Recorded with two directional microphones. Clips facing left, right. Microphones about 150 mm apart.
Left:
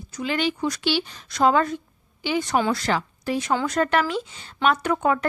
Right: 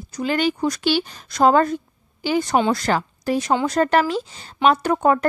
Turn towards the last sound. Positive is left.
turn(degrees=-40)  # may be behind; listen again after turning